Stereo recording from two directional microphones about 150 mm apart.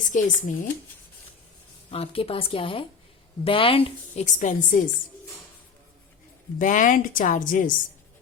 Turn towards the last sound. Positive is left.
turn(degrees=60)  # may be behind; listen again after turning